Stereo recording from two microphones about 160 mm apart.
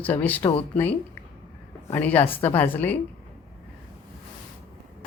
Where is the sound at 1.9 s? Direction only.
10° left (ahead or behind).